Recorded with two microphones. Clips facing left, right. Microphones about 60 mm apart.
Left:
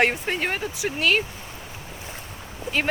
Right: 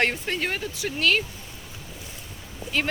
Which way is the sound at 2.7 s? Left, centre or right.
Left.